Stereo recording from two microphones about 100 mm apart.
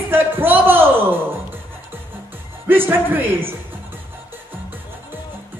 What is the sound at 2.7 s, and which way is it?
Speech, 20° right (ahead or behind).